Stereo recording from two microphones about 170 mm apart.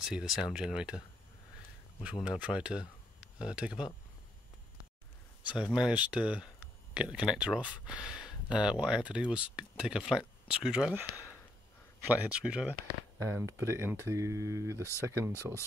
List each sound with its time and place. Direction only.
0.0 s speech: 5° right (ahead or behind)
2.2 s speech: 5° right (ahead or behind)
5.6 s speech: 5° right (ahead or behind)